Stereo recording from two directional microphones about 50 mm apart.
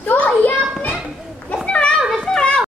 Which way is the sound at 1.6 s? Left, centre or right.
Left.